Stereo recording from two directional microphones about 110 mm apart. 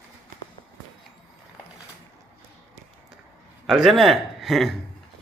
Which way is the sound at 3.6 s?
Centre (ahead or behind).